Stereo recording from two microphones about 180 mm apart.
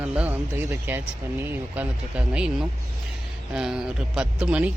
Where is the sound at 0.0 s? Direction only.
5° right (ahead or behind).